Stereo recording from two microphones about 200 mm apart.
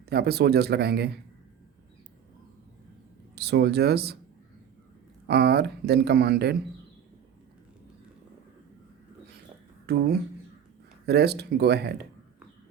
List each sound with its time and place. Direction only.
0.0 s speech: 55° right (ahead or behind)
3.3 s speech: 55° right (ahead or behind)
5.3 s speech: 55° right (ahead or behind)
9.8 s speech: 50° right (ahead or behind)